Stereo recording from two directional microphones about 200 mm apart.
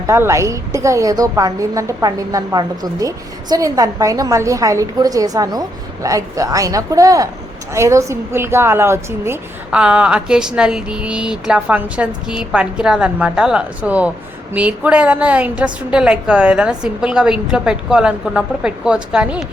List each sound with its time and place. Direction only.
0.1 s a woman's voice: 15° right (ahead or behind)